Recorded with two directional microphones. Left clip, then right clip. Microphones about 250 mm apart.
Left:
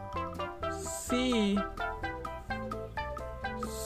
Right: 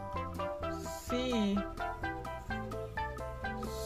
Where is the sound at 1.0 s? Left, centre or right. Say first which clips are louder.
Left 4 dB; left.